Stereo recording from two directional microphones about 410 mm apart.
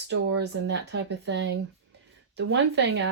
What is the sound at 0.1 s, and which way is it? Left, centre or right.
Speech, right.